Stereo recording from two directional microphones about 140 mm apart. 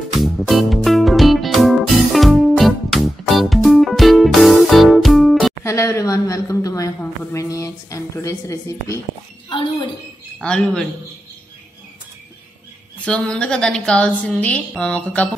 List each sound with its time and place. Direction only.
0.1 s music: centre (ahead or behind)
5.6 s a woman's voice: 20° left (ahead or behind)
9.5 s chink: 35° left (ahead or behind)
10.4 s a woman's voice: 5° left (ahead or behind)
13.0 s a woman's voice: 10° left (ahead or behind)